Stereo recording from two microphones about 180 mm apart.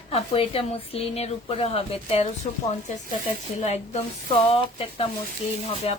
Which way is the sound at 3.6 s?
35° left (ahead or behind).